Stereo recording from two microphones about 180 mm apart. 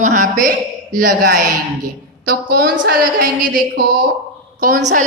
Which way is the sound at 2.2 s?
60° right (ahead or behind).